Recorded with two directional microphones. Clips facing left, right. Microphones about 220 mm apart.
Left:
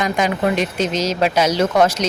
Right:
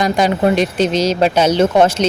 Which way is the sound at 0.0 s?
35° right (ahead or behind).